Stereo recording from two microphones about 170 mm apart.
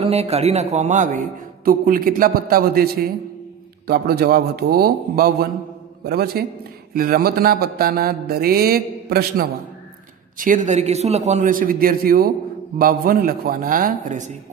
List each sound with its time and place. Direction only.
0.0 s a man's voice: 35° right (ahead or behind); by 9.5 s 65° right (ahead or behind)
10.3 s a man's voice: 50° right (ahead or behind)